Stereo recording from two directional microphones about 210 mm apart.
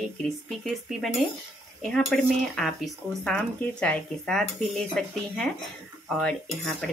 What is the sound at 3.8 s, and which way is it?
Speech, 5° left (ahead or behind).